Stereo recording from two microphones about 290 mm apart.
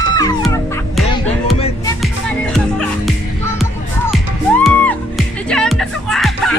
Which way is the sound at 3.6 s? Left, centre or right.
Centre.